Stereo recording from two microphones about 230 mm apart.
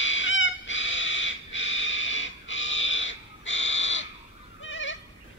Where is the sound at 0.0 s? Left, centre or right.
Left.